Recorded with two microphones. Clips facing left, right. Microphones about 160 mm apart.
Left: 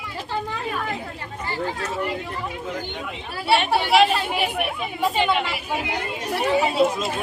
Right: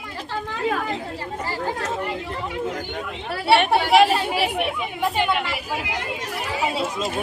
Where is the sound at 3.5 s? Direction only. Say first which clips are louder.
Right 2 dB; 60° right (ahead or behind).